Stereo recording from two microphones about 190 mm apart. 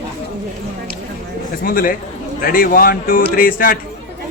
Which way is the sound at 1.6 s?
50° left (ahead or behind).